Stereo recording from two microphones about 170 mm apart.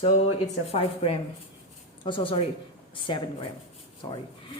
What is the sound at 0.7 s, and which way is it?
Speech, 35° left (ahead or behind).